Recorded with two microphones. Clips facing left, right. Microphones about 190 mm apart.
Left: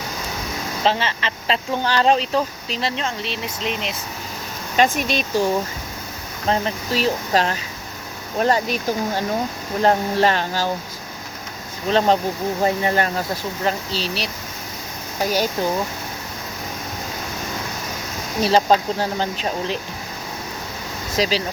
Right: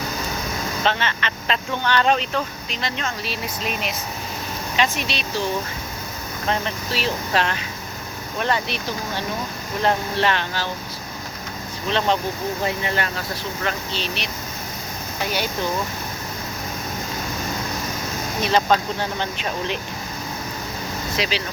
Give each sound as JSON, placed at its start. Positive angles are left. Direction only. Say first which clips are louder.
{"t": 0.9, "sound": "speech", "louder": "left 3 dB", "side_deg": 30}
{"t": 4.8, "sound": "speech", "louder": "left 6 dB", "side_deg": 45}
{"t": 6.5, "sound": "speech", "louder": "left 4 dB", "side_deg": 40}
{"t": 11.9, "sound": "speech", "louder": "left 4 dB", "side_deg": 40}
{"t": 18.4, "sound": "speech", "louder": "left 3 dB", "side_deg": 35}
{"t": 21.2, "sound": "speech", "louder": "left 5 dB", "side_deg": 40}